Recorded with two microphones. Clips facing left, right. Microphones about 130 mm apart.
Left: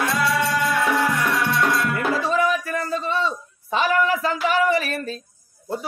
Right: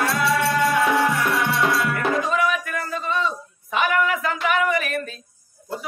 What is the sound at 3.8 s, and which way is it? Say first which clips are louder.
A man's voice: left 1 dB; 30° left (ahead or behind).